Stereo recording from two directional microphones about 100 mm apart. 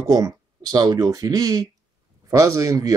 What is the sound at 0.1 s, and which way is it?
Speech, 40° right (ahead or behind).